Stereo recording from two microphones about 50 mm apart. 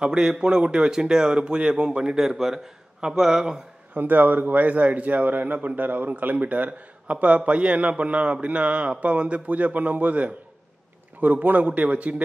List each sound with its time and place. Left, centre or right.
0.0 s speech: centre
2.1 s speech: centre
3.9 s a man's voice: right